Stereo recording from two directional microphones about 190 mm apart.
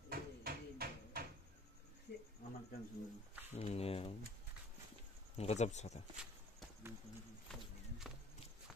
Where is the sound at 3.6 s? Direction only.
30° left (ahead or behind).